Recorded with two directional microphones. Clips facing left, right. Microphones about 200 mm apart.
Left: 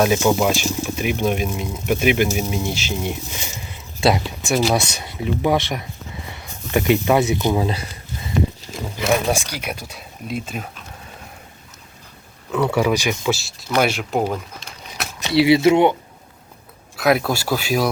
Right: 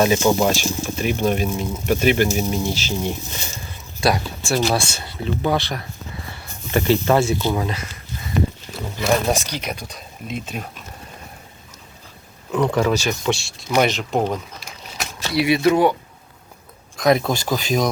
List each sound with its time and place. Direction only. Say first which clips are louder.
0.0 s speech: even; 5° left (ahead or behind)
4.0 s speech: left 2 dB; 20° left (ahead or behind)
9.0 s speech: even; 10° left (ahead or behind)
12.5 s speech: even; 5° left (ahead or behind)
15.2 s speech: left 4 dB; 25° left (ahead or behind)
17.0 s speech: right 1 dB; 5° left (ahead or behind)